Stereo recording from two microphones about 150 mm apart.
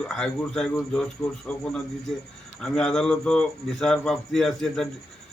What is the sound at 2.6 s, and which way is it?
Speech, 5° left (ahead or behind).